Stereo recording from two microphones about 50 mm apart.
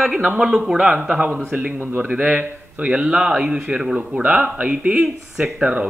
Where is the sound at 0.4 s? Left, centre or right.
Centre.